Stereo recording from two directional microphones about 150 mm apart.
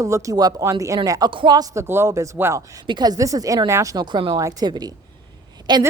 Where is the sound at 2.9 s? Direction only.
30° right (ahead or behind).